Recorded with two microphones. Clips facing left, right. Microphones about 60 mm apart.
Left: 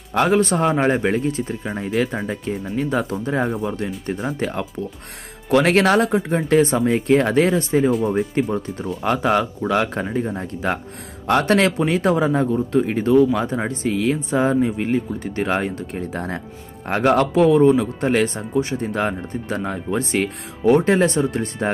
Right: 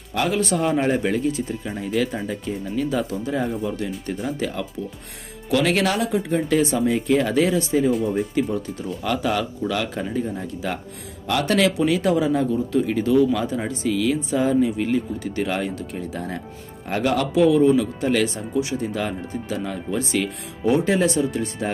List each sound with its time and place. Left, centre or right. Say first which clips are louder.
0.4 s speech: left 3 dB; left
3.0 s speech: left 2 dB; left
3.4 s speech: left 2 dB; left
4.0 s speech: left 2 dB; left
5.6 s speech: left 5 dB; left
6.8 s speech: left 3 dB; left
16.1 s speech: left 3 dB; left